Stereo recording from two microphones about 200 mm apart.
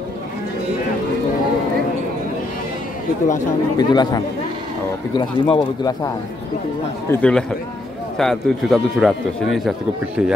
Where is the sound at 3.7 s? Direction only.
20° left (ahead or behind).